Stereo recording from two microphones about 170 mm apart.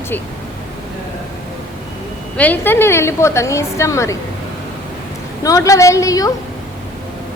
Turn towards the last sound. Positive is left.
turn(degrees=20)  # may be behind; listen again after turning